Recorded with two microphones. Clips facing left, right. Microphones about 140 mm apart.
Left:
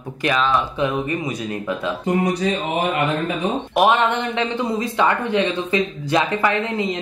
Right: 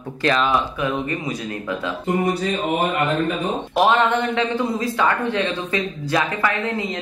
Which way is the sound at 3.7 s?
20° left (ahead or behind).